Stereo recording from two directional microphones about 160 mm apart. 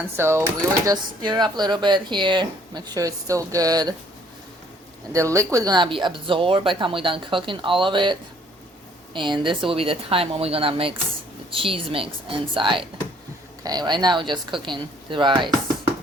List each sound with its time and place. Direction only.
0.2 s speech: 15° right (ahead or behind)
5.1 s speech: 20° right (ahead or behind)
9.1 s speech: 30° right (ahead or behind)